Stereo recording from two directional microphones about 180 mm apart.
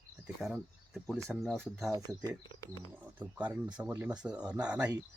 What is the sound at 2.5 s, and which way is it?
Speech, 25° left (ahead or behind).